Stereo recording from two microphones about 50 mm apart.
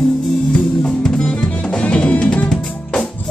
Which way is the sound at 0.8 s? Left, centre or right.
Centre.